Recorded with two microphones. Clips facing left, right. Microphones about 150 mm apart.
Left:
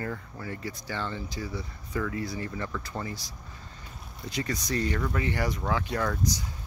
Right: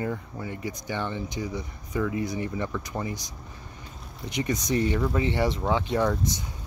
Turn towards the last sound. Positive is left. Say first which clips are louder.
# right 4 dB
turn(degrees=-20)  # may be behind; listen again after turning